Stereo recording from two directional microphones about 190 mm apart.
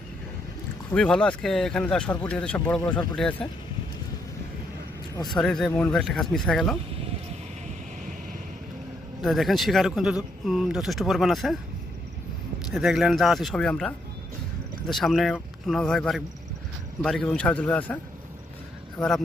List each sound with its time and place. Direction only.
0.9 s speech: 5° left (ahead or behind)
5.1 s speech: 20° left (ahead or behind)
5.4 s speech: 5° left (ahead or behind)
9.2 s speech: centre (ahead or behind)
12.7 s a man's voice: centre (ahead or behind)